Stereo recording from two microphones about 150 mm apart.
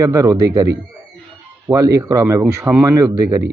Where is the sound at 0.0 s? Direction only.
20° right (ahead or behind).